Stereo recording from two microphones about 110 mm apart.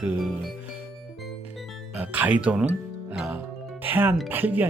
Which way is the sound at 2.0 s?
15° right (ahead or behind).